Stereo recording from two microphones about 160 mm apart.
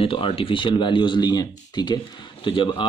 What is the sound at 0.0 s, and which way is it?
Speech, 35° left (ahead or behind).